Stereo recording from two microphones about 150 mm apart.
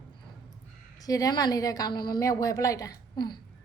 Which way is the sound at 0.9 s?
25° left (ahead or behind).